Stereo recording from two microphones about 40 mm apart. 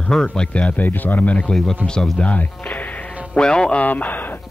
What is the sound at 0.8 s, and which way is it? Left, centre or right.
Speech, left.